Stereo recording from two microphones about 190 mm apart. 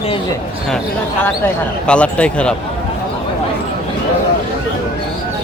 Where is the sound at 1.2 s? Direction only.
10° left (ahead or behind).